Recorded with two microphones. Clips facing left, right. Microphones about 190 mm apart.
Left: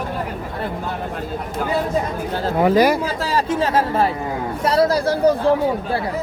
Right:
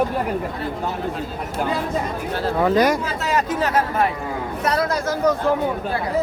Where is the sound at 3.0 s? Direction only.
30° left (ahead or behind).